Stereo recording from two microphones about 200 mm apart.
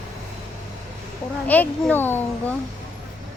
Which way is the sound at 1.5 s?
10° left (ahead or behind).